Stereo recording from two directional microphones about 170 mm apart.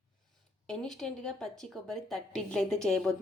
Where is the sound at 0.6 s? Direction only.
5° left (ahead or behind).